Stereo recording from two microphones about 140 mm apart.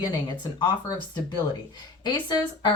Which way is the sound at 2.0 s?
30° left (ahead or behind).